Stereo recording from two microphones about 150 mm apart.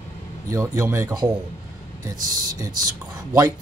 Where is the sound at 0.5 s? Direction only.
20° right (ahead or behind).